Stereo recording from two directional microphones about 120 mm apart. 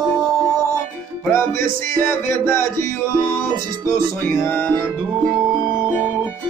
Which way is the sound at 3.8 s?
20° left (ahead or behind).